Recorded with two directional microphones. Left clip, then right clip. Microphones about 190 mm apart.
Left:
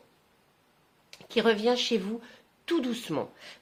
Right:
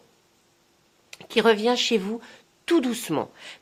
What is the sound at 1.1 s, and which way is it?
Speech, 40° right (ahead or behind).